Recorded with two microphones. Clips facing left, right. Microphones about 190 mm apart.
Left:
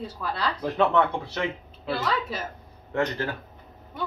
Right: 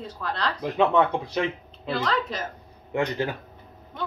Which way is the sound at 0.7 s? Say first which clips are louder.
Right 2 dB; 15° right (ahead or behind).